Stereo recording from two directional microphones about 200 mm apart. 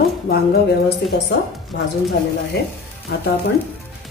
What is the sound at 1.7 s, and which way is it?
Speech, 65° left (ahead or behind).